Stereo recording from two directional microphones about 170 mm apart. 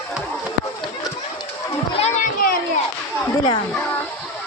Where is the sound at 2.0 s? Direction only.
45° left (ahead or behind).